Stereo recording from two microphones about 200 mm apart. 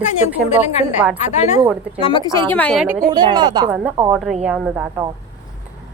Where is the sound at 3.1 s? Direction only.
20° right (ahead or behind).